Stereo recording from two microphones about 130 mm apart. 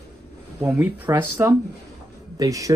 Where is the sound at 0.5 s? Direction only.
15° right (ahead or behind).